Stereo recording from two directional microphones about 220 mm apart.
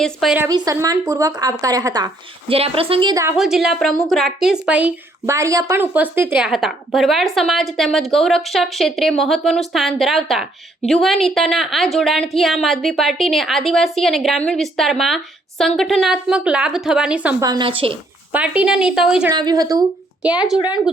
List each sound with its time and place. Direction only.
0.0 s a woman's voice: centre (ahead or behind)
0.4 s a woman's voice: 15° right (ahead or behind)
3.3 s a woman's voice: centre (ahead or behind)
17.4 s a woman's voice: 20° right (ahead or behind)
18.3 s a woman's voice: 5° right (ahead or behind)
19.3 s speech: 20° right (ahead or behind)
20.2 s a woman's voice: 5° right (ahead or behind)
20.6 s speech: 20° left (ahead or behind)